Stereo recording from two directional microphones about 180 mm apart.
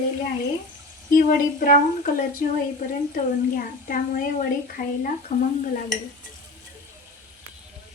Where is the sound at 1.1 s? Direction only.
50° left (ahead or behind).